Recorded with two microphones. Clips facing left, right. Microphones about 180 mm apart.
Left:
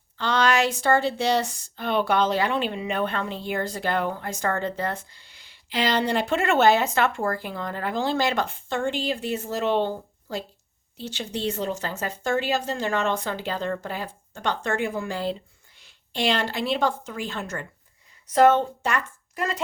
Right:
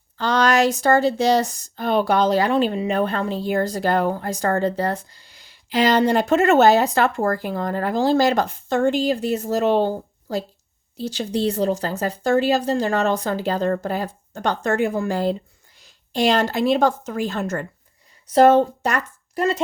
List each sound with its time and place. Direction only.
0.2 s speech: 40° right (ahead or behind)